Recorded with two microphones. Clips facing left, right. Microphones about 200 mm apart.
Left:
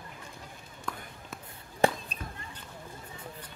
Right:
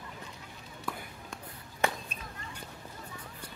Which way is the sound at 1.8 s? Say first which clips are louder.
Left 6 dB; 30° left (ahead or behind).